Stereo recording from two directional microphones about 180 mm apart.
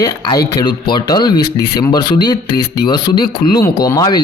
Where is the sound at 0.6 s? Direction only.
25° left (ahead or behind).